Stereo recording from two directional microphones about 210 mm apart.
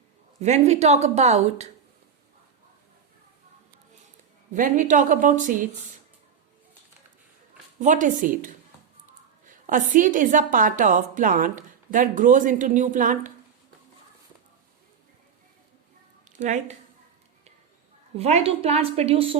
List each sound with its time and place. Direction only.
0.3 s a woman's voice: 30° right (ahead or behind)
4.5 s a woman's voice: 40° right (ahead or behind)
7.8 s a woman's voice: 35° right (ahead or behind)
16.4 s a woman's voice: 35° right (ahead or behind)
18.2 s a woman's voice: 30° right (ahead or behind)